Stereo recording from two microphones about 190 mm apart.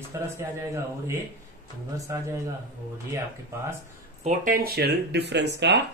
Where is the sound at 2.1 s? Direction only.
15° right (ahead or behind).